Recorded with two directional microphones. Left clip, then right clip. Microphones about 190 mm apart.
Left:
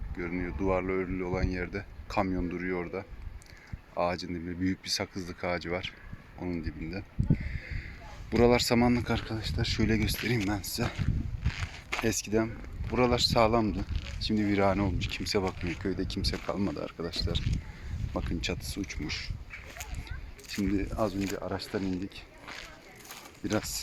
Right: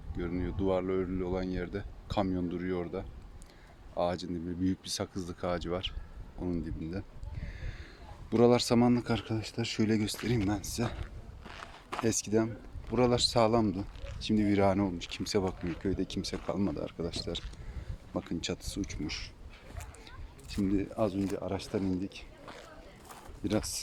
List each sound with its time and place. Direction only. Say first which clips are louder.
0.2 s speech: left 1 dB; 5° left (ahead or behind)
7.5 s a sound: left 7 dB; 15° right (ahead or behind)
8.3 s speech: left 1 dB; centre (ahead or behind)
11.5 s a sound: left 4 dB; 10° left (ahead or behind)
12.9 s speech: left 1 dB; 5° left (ahead or behind)
15.4 s speech: left 2 dB; 20° left (ahead or behind)
15.8 s speech: left 1 dB; 5° left (ahead or behind)
20.6 s speech: even; 5° left (ahead or behind)
23.4 s speech: left 1 dB; centre (ahead or behind)